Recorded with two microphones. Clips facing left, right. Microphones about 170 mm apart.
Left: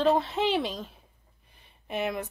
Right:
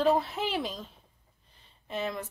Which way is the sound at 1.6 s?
15° left (ahead or behind).